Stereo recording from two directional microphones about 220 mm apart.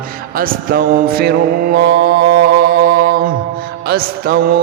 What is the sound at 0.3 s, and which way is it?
Mantra, 40° right (ahead or behind).